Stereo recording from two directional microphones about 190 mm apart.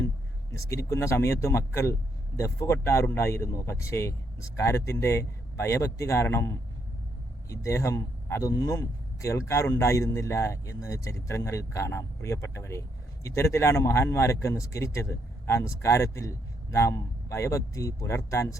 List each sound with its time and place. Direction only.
0.6 s speech: 15° left (ahead or behind)